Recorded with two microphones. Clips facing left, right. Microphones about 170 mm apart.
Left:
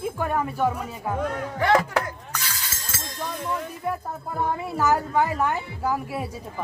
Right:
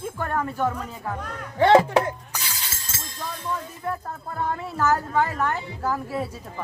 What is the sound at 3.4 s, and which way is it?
A woman's voice, 10° left (ahead or behind).